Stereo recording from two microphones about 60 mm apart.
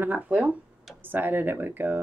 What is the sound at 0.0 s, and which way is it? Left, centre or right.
Speech, right.